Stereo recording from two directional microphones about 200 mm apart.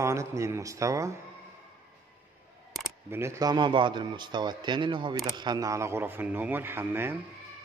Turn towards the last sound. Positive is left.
turn(degrees=-10)  # may be behind; listen again after turning